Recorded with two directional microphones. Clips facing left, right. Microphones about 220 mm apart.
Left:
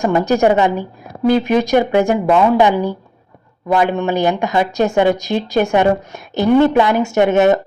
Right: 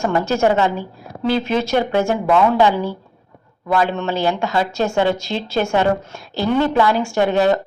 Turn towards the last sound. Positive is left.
turn(degrees=20)  # may be behind; listen again after turning